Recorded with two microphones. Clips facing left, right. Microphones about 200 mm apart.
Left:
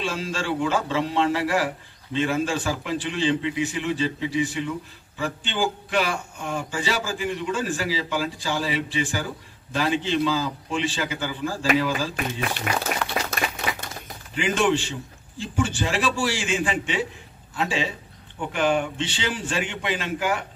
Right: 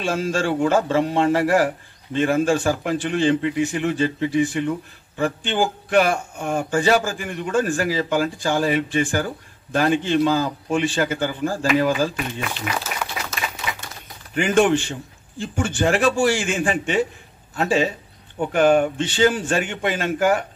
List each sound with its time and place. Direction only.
0.0 s a man's voice: 50° right (ahead or behind)
12.7 s speech: 50° left (ahead or behind)
13.2 s clapping: 50° left (ahead or behind)
14.3 s a man's voice: 50° right (ahead or behind)